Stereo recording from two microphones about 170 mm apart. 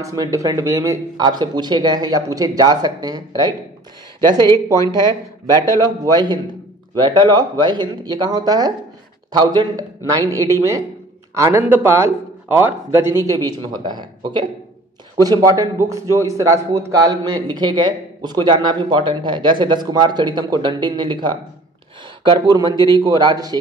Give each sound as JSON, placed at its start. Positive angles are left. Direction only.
{"t": 0.0, "sound": "a man's voice", "side_deg": -20}